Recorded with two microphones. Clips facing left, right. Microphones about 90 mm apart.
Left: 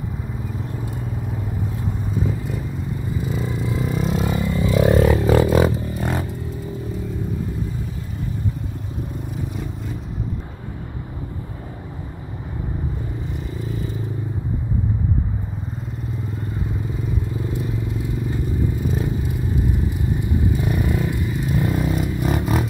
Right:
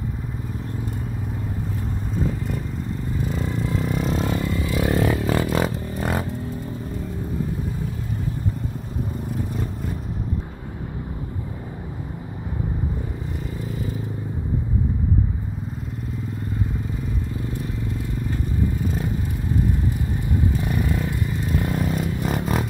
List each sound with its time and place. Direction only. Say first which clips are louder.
2.2 s vehicle: left 1 dB; centre (ahead or behind)
4.3 s vehicle: left 3 dB; 15° left (ahead or behind)
5.6 s a sound: left 5 dB; centre (ahead or behind)
20.6 s motorcycle: left 2 dB; 10° left (ahead or behind)
21.8 s vehicle: left 2 dB; 5° left (ahead or behind)